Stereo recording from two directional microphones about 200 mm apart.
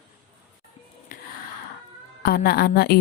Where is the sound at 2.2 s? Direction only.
50° left (ahead or behind).